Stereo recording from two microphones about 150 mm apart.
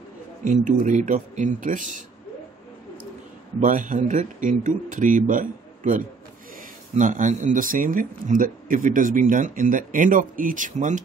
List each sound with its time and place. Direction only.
0.4 s a man's voice: 55° right (ahead or behind)
3.6 s a man's voice: 60° right (ahead or behind)